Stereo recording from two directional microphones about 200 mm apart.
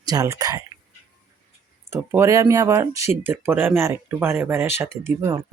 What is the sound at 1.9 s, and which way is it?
Speech, 15° right (ahead or behind).